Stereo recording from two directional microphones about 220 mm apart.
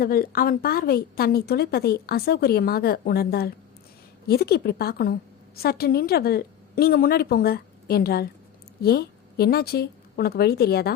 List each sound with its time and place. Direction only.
0.0 s a woman's voice: 40° left (ahead or behind)